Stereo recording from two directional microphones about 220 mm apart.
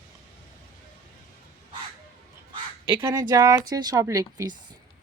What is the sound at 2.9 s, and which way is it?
Speech, 10° right (ahead or behind).